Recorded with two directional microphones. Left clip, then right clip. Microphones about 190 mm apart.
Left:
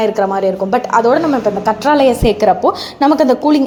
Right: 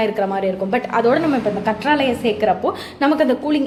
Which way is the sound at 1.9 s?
30° left (ahead or behind).